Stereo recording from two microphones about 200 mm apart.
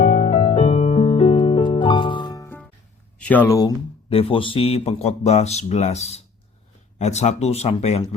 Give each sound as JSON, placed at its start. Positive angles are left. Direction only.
{"t": 0.0, "sound": "music", "side_deg": 40}
{"t": 0.5, "sound": "music", "side_deg": 25}
{"t": 3.2, "sound": "speech", "side_deg": 10}